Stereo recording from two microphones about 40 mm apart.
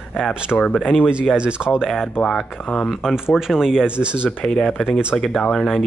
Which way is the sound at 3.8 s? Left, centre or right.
Right.